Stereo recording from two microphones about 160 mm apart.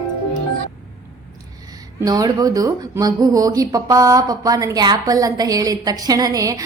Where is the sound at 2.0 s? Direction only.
25° right (ahead or behind).